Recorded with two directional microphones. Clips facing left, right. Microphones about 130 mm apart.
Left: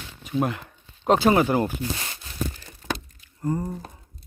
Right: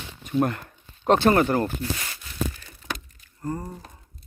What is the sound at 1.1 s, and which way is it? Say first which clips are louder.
Speech: even; 5° left (ahead or behind).